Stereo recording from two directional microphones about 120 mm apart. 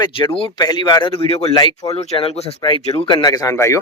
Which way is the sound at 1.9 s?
55° left (ahead or behind).